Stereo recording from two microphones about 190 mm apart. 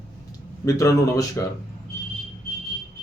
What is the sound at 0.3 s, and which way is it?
A man's voice, 15° left (ahead or behind).